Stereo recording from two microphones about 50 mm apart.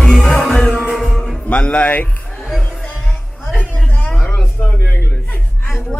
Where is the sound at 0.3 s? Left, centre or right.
Centre.